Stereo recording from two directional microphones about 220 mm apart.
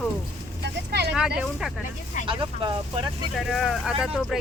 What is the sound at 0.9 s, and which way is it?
Speech, 50° right (ahead or behind).